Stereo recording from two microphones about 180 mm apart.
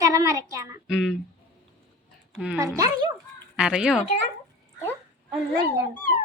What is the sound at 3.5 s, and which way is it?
Speech, 5° right (ahead or behind).